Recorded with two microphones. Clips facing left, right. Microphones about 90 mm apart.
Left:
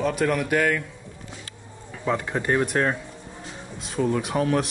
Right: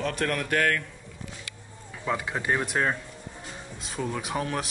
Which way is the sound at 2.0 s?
Centre (ahead or behind).